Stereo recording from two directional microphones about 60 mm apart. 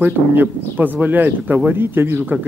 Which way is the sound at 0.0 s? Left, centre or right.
Right.